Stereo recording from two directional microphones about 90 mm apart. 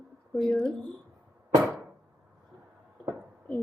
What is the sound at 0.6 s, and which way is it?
Speech, 10° left (ahead or behind).